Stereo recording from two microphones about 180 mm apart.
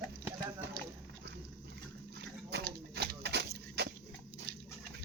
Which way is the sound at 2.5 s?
65° right (ahead or behind).